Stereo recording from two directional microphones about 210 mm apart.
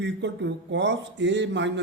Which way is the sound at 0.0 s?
55° right (ahead or behind).